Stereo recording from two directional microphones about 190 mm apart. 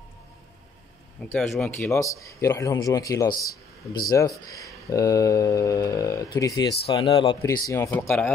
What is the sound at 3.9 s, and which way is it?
Speech, 20° left (ahead or behind).